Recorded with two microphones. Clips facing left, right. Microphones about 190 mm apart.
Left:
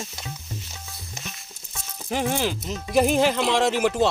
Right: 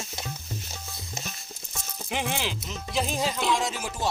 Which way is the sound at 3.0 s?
70° left (ahead or behind).